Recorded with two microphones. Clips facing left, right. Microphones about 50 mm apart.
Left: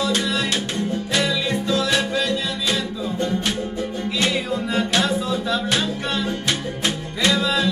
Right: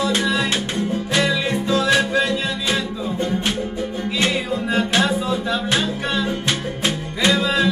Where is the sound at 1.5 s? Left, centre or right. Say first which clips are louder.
Right 3 dB; right.